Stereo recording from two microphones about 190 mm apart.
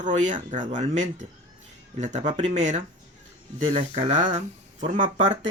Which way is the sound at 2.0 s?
40° right (ahead or behind).